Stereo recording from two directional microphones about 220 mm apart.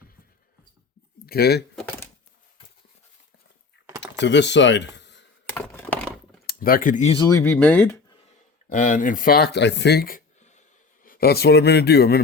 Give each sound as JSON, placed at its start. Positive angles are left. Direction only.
{"t": 1.3, "sound": "speech", "side_deg": 45}
{"t": 4.0, "sound": "speech", "side_deg": 55}
{"t": 5.5, "sound": "computer keyboard", "side_deg": 10}
{"t": 6.4, "sound": "speech", "side_deg": 45}
{"t": 7.2, "sound": "speech", "side_deg": 15}
{"t": 8.7, "sound": "a man's voice", "side_deg": 35}